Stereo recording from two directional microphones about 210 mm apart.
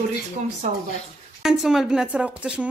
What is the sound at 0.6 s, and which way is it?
Speech, 35° right (ahead or behind).